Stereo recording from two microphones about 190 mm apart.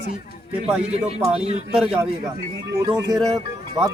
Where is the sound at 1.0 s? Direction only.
35° right (ahead or behind).